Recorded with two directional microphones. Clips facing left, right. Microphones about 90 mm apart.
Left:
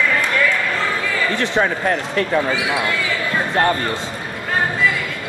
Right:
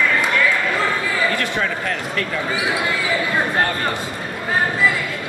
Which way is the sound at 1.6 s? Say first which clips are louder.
Left 4 dB; 35° left (ahead or behind).